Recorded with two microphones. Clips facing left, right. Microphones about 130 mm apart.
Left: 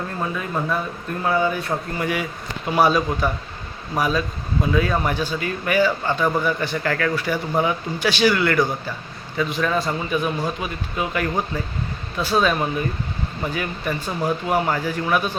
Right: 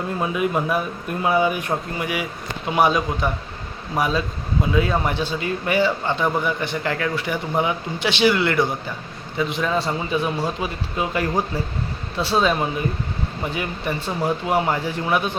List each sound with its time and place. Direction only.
0.2 s speech: 15° right (ahead or behind)